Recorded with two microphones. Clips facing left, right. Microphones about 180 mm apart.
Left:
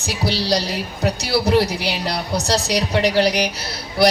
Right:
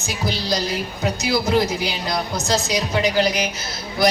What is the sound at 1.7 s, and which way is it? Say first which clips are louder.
Music: left 1 dB; 70° left (ahead or behind).